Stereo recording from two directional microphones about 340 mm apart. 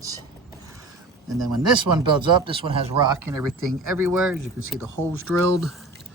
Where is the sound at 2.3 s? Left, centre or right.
Centre.